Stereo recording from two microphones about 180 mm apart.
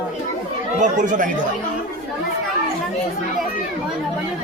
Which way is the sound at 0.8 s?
45° right (ahead or behind).